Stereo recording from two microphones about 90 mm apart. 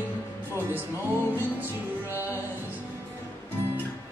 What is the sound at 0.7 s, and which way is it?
Music, 20° right (ahead or behind).